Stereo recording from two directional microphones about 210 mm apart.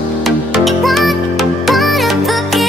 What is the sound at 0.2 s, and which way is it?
Music, centre (ahead or behind).